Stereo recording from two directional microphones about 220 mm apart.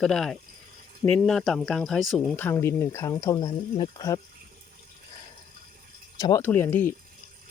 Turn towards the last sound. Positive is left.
turn(degrees=10)  # may be behind; listen again after turning